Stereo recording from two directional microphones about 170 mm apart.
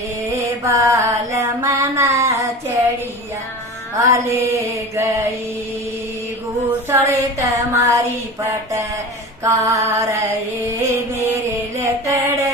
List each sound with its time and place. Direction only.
0.5 s mantra: 20° right (ahead or behind)
4.1 s mantra: 15° right (ahead or behind)
6.9 s a sound: 20° right (ahead or behind)
9.4 s mantra: 20° right (ahead or behind)